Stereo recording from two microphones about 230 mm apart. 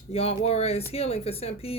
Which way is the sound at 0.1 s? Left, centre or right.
Left.